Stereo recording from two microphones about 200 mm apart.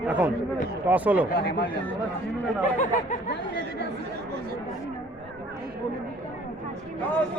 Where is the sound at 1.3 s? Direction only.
55° left (ahead or behind).